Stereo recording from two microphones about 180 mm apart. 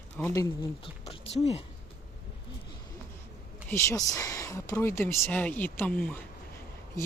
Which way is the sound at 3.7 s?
15° left (ahead or behind).